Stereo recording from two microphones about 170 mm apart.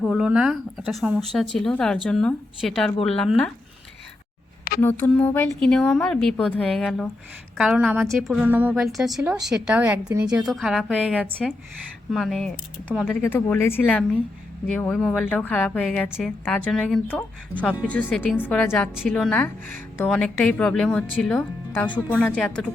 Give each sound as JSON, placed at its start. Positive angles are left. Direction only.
{"t": 0.0, "sound": "a woman's voice", "side_deg": 0}
{"t": 4.8, "sound": "a woman's voice", "side_deg": 10}
{"t": 10.1, "sound": "a woman's voice", "side_deg": -25}
{"t": 10.3, "sound": "a woman's voice", "side_deg": 0}
{"t": 13.2, "sound": "a woman's voice", "side_deg": 15}